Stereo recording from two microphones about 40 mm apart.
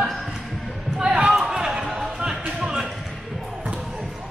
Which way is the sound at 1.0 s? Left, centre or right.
Right.